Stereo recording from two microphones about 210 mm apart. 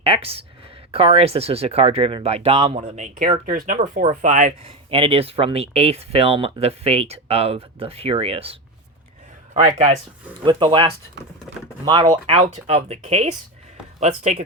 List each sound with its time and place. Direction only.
0.0 s speech: 25° right (ahead or behind)
10.4 s speech: 25° right (ahead or behind)
11.5 s speech: centre (ahead or behind)
11.9 s speech: 25° right (ahead or behind)